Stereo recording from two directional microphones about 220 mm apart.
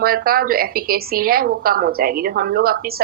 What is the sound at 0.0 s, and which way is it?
A woman's voice, 40° right (ahead or behind).